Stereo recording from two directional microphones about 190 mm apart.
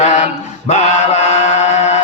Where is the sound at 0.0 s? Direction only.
35° left (ahead or behind).